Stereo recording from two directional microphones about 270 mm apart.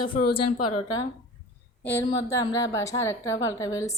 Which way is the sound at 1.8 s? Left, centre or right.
Centre.